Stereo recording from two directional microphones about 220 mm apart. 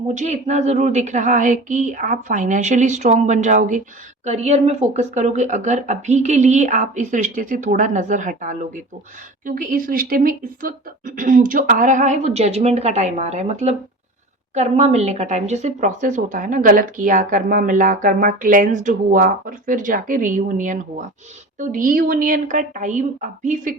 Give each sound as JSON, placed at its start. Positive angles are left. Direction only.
{"t": 0.1, "sound": "speech", "side_deg": -30}